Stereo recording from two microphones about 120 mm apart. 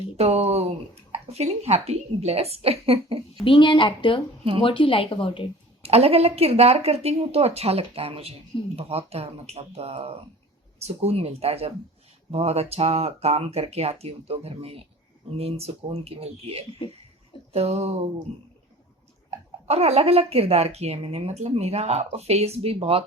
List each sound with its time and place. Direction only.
0.2 s a sound: 60° right (ahead or behind)
1.1 s speech: 60° right (ahead or behind)
3.4 s speech: 45° left (ahead or behind)
5.8 s speech: 55° right (ahead or behind)
19.5 s speech: 60° right (ahead or behind)